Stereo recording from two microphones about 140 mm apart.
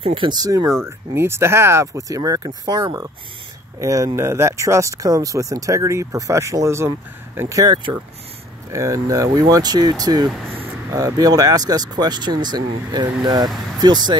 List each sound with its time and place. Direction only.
0.0 s speech: 35° right (ahead or behind)
0.8 s speech: 15° right (ahead or behind)
8.7 s speech: 20° right (ahead or behind)